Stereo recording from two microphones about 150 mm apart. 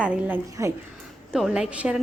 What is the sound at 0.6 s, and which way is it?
Speech, 20° right (ahead or behind).